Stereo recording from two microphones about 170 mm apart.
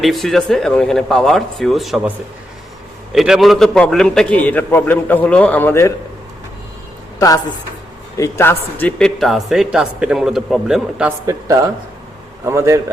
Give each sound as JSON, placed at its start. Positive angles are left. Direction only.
{"t": 0.0, "sound": "a man's voice", "side_deg": 0}
{"t": 8.2, "sound": "a man's voice", "side_deg": 15}
{"t": 11.3, "sound": "a man's voice", "side_deg": -20}